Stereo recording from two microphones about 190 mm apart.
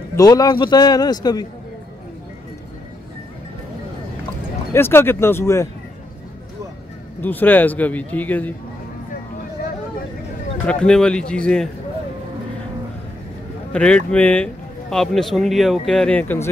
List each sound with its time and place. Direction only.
0.1 s a man's voice: 20° left (ahead or behind)
4.7 s a man's voice: 10° left (ahead or behind)
7.2 s a man's voice: 10° left (ahead or behind)
10.7 s a man's voice: 5° left (ahead or behind)
13.7 s a man's voice: 5° left (ahead or behind)